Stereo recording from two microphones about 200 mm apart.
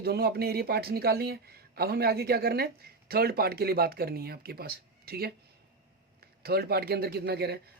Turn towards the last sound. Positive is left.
turn(degrees=-55)  # may be behind; listen again after turning